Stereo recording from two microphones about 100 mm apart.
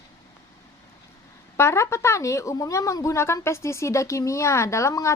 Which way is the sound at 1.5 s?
30° left (ahead or behind).